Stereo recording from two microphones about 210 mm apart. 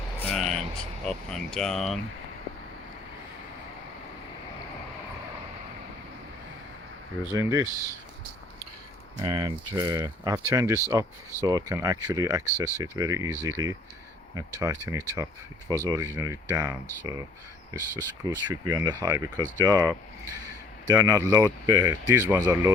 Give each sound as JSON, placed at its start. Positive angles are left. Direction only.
{"t": 0.2, "sound": "vehicle", "side_deg": 5}
{"t": 1.0, "sound": "speech", "side_deg": 5}
{"t": 7.3, "sound": "speech", "side_deg": -15}
{"t": 9.1, "sound": "speech", "side_deg": -20}